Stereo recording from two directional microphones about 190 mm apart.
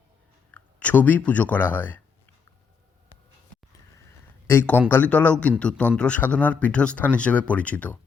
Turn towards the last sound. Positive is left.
turn(degrees=5)  # may be behind; listen again after turning